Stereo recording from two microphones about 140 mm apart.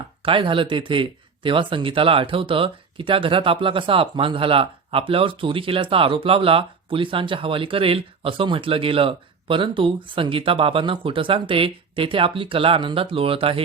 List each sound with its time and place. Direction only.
0.2 s speech: 40° right (ahead or behind)